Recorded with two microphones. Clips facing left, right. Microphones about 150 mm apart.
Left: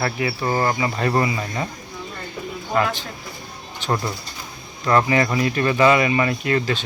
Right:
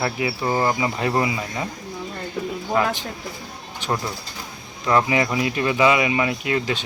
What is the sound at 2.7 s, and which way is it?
Speech, 10° right (ahead or behind).